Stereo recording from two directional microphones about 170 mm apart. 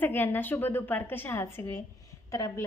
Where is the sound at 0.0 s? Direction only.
10° left (ahead or behind).